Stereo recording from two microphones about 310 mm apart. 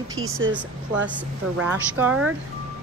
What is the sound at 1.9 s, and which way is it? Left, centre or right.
Speech, centre.